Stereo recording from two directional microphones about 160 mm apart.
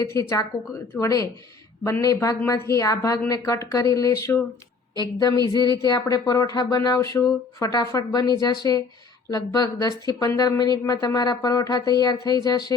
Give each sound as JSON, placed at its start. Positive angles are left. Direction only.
{"t": 0.0, "sound": "speech", "side_deg": 20}
{"t": 5.5, "sound": "speech", "side_deg": 25}